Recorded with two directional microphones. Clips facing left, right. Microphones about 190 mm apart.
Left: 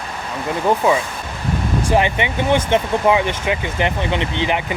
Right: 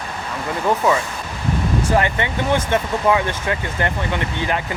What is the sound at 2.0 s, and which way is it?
Speech, 20° left (ahead or behind).